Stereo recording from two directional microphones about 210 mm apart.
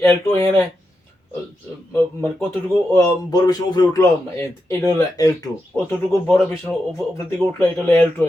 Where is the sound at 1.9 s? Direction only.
10° left (ahead or behind).